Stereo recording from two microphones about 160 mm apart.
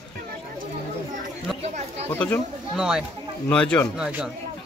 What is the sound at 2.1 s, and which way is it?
Speech, 10° left (ahead or behind).